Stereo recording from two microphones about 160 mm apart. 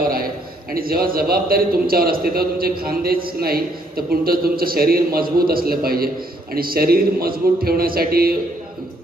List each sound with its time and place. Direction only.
0.7 s a man's voice: 65° right (ahead or behind)